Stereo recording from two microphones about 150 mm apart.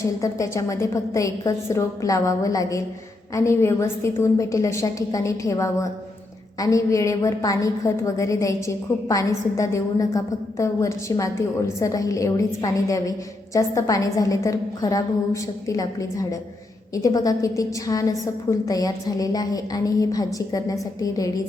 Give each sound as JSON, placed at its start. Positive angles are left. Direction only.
{"t": 0.0, "sound": "a woman's voice", "side_deg": 20}